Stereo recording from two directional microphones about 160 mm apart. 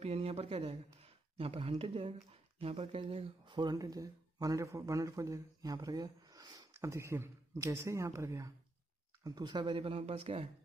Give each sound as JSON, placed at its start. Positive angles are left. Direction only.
{"t": 0.0, "sound": "speech", "side_deg": -40}